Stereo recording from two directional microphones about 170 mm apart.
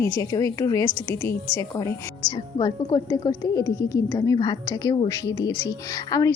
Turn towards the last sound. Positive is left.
turn(degrees=20)  # may be behind; listen again after turning